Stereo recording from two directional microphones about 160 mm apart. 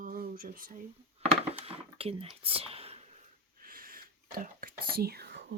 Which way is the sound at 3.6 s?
65° right (ahead or behind).